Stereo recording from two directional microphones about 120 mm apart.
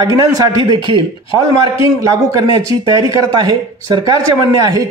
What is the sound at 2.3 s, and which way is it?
A man's voice, 30° right (ahead or behind).